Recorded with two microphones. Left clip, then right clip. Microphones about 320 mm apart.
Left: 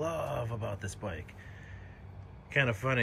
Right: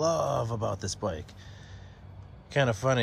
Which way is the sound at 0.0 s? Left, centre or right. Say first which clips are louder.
Right 7 dB; centre.